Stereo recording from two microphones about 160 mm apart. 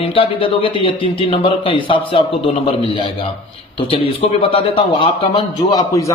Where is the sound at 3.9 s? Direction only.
35° left (ahead or behind).